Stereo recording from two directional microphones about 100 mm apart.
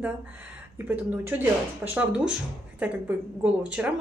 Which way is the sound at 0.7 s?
20° right (ahead or behind).